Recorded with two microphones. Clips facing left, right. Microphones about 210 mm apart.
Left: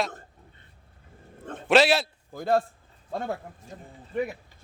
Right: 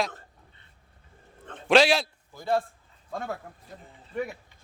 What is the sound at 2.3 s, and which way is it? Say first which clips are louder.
Speech: left 3 dB; 50° left (ahead or behind).